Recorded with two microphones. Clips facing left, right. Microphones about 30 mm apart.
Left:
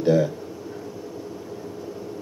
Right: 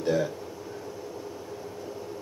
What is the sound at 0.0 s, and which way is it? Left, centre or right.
Speech, left.